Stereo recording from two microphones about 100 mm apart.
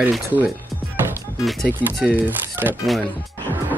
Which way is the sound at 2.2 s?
20° right (ahead or behind).